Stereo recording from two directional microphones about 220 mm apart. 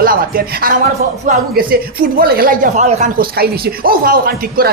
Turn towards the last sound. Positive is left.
turn(degrees=-45)  # may be behind; listen again after turning